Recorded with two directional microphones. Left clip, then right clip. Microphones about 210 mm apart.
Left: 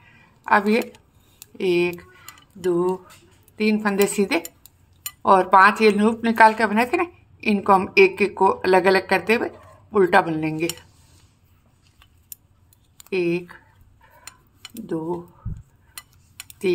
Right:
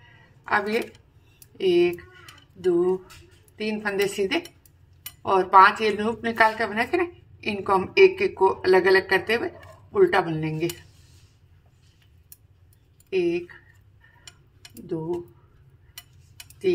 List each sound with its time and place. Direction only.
0.4 s a woman's voice: 25° left (ahead or behind)
13.1 s a woman's voice: 30° left (ahead or behind)